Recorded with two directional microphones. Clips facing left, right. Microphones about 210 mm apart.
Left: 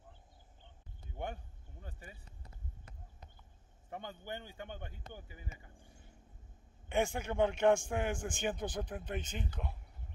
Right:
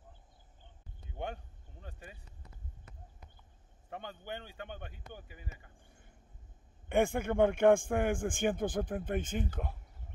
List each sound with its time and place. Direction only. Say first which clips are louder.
3.9 s speech: right 1 dB; 15° left (ahead or behind)
6.9 s a man's voice: right 5 dB; 55° right (ahead or behind)